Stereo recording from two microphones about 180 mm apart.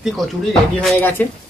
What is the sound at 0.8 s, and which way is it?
Music, 10° left (ahead or behind).